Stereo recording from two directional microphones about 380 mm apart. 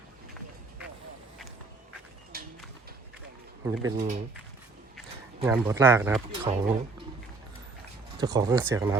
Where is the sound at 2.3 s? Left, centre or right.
Right.